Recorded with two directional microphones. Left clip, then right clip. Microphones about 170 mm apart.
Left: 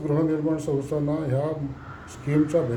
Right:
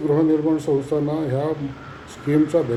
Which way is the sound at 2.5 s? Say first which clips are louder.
Right 2 dB; 20° left (ahead or behind).